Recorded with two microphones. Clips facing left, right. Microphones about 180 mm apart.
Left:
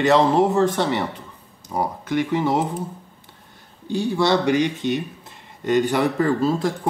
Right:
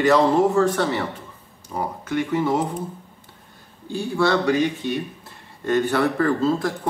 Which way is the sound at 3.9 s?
20° left (ahead or behind).